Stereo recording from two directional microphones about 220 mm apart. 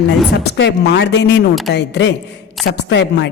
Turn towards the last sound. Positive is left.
turn(degrees=50)  # may be behind; listen again after turning